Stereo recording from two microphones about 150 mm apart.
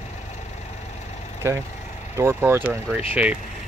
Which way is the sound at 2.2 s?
15° right (ahead or behind).